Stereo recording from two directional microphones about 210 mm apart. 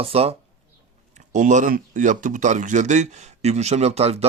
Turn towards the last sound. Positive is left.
turn(degrees=-30)  # may be behind; listen again after turning